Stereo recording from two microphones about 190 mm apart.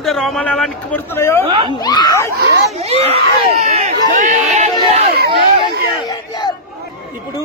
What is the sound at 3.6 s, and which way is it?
Crowd, 40° right (ahead or behind).